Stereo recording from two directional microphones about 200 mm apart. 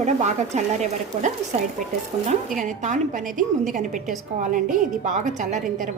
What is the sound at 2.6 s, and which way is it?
A woman's voice, 40° right (ahead or behind).